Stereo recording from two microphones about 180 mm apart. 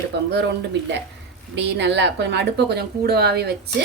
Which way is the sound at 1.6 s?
70° right (ahead or behind).